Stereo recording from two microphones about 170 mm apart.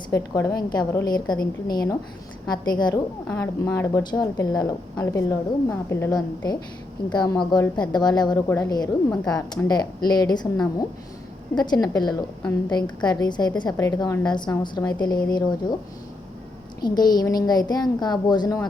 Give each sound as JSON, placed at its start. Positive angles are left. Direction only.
{"t": 0.1, "sound": "a woman's voice", "side_deg": 20}
{"t": 11.5, "sound": "a woman's voice", "side_deg": 25}
{"t": 16.8, "sound": "a woman's voice", "side_deg": 25}